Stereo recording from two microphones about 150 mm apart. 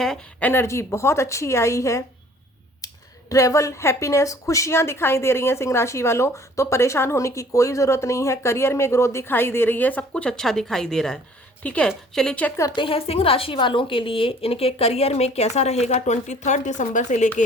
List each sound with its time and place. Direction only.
0.0 s a woman's voice: 5° left (ahead or behind)
12.7 s a woman's voice: 35° left (ahead or behind); by 17.2 s 55° left (ahead or behind)